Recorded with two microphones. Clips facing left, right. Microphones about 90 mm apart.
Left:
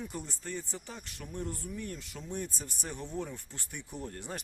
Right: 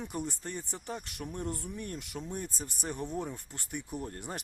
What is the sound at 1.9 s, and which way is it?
Speech, 15° right (ahead or behind).